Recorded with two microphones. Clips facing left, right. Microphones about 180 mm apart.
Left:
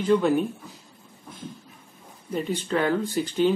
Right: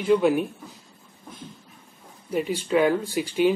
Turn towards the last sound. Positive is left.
turn(degrees=-10)  # may be behind; listen again after turning